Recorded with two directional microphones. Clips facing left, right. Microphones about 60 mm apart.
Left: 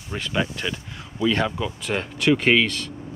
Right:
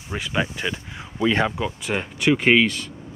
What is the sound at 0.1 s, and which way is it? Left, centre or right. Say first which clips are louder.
Speech: right 1 dB; centre.